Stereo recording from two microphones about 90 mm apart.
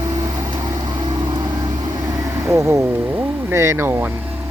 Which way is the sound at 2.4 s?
25° right (ahead or behind).